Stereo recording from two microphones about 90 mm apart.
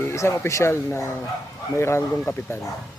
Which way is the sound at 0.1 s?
30° left (ahead or behind).